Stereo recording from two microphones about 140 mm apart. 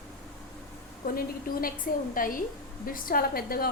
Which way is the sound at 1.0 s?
90° left.